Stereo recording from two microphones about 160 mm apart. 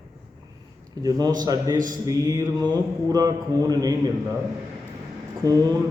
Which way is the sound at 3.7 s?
25° right (ahead or behind).